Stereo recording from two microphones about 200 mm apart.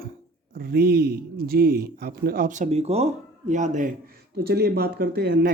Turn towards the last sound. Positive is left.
turn(degrees=-50)  # may be behind; listen again after turning